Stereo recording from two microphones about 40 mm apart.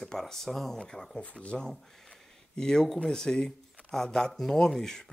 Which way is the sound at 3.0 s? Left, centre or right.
Centre.